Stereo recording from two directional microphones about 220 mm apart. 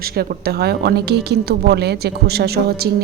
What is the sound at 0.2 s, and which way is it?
A woman's voice, 45° right (ahead or behind).